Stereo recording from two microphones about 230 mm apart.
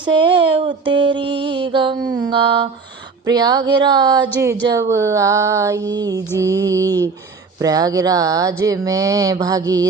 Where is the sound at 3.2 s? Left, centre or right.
Centre.